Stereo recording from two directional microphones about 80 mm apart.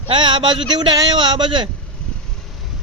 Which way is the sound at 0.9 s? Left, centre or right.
Right.